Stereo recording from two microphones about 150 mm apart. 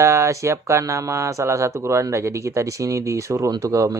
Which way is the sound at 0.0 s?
15° right (ahead or behind).